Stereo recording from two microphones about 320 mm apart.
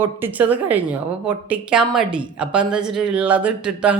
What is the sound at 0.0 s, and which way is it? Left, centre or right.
A woman's voice, centre.